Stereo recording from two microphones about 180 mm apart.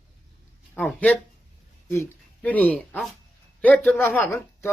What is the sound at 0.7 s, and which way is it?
Speech, 5° left (ahead or behind).